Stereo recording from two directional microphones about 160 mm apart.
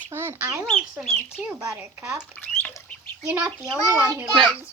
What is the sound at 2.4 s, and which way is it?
Speech, 5° left (ahead or behind).